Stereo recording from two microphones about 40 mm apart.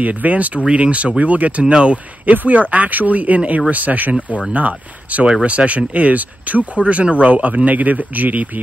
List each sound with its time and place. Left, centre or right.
0.0 s speech: right
1.7 s speech: right
2.2 s speech: right